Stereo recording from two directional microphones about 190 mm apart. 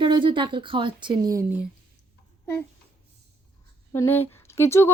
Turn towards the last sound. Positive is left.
turn(degrees=15)  # may be behind; listen again after turning